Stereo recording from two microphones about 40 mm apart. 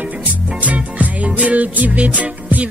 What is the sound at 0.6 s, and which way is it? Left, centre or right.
Music, right.